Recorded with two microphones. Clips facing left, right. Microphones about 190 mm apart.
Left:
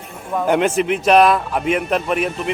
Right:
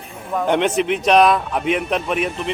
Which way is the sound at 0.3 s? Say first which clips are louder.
Left 1 dB; 5° left (ahead or behind).